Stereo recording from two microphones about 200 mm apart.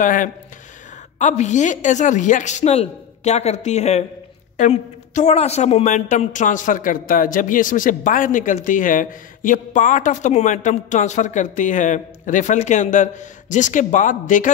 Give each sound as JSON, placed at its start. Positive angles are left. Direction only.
{"t": 0.0, "sound": "a woman's voice", "side_deg": 40}